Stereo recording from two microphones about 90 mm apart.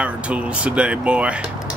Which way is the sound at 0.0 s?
15° right (ahead or behind).